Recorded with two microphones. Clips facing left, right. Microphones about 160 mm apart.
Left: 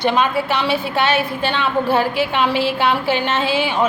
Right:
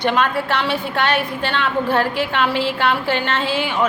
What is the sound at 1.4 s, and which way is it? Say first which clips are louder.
Speech: left 2 dB; 20° left (ahead or behind).